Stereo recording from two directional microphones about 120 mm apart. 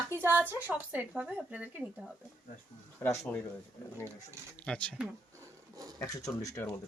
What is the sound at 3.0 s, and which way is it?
Speech, 20° left (ahead or behind).